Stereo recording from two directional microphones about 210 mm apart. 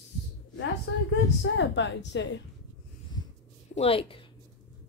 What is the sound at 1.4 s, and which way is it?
A woman's voice, 60° left (ahead or behind).